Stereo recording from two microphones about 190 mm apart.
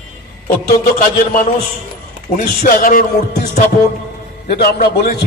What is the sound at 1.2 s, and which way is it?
A man's voice, 45° left (ahead or behind).